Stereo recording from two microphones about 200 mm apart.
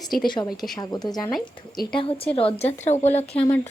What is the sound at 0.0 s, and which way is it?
Speech, centre (ahead or behind).